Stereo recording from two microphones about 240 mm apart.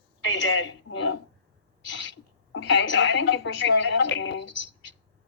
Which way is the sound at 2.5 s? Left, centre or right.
Left.